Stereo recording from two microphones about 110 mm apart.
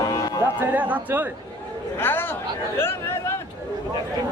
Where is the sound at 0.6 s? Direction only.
15° right (ahead or behind).